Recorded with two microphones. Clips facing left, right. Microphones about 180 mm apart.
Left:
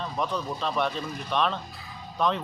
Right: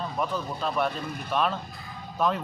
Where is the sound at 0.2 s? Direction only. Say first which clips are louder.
Left 1 dB; centre (ahead or behind).